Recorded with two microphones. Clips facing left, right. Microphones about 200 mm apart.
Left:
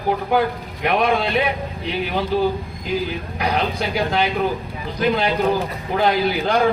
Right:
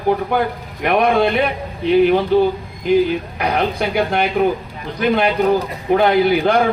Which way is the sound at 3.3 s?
60° right (ahead or behind).